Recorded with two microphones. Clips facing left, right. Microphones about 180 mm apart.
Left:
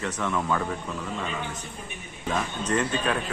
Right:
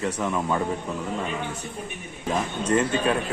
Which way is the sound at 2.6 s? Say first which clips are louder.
Right 4 dB; 30° right (ahead or behind).